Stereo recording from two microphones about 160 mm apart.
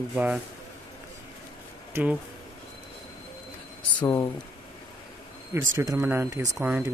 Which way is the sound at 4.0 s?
15° left (ahead or behind).